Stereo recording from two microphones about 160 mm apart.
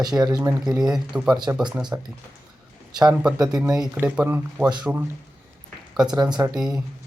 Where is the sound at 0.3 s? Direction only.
25° right (ahead or behind).